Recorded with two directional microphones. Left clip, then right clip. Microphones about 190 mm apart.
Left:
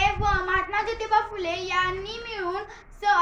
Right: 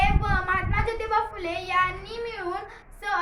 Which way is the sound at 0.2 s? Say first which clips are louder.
Left 2 dB; 20° right (ahead or behind).